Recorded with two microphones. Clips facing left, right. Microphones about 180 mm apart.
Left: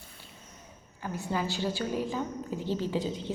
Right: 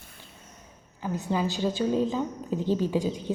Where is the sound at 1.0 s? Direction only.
20° right (ahead or behind).